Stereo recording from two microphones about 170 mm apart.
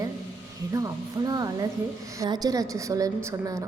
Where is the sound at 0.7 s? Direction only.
20° right (ahead or behind).